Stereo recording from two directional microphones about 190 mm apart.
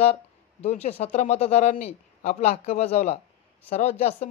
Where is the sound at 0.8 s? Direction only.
35° left (ahead or behind).